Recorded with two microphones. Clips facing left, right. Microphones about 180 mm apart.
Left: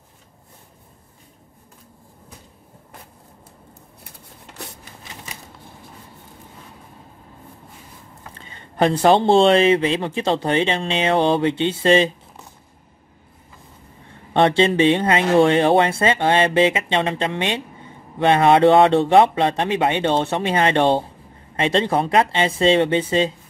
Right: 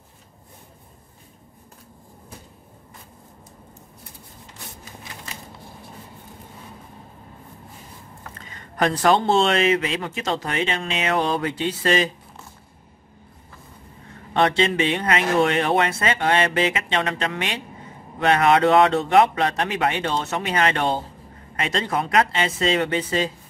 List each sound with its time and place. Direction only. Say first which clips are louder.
8.4 s speech: left 4 dB; 30° left (ahead or behind)
14.3 s speech: left 4 dB; 30° left (ahead or behind)